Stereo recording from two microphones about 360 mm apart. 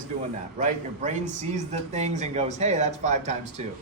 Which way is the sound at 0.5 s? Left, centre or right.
Centre.